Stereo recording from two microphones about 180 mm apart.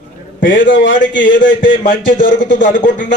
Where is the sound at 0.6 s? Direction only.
90° left.